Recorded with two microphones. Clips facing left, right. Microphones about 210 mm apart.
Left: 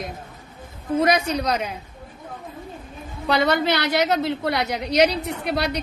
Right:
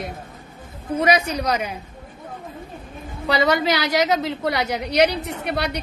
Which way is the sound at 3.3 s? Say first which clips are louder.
Right 1 dB; 10° right (ahead or behind).